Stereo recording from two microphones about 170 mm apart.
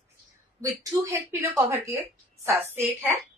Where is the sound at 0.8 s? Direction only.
20° right (ahead or behind).